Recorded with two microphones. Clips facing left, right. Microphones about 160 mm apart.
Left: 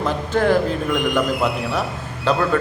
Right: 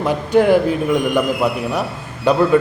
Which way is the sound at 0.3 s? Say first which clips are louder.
Right 6 dB; 15° right (ahead or behind).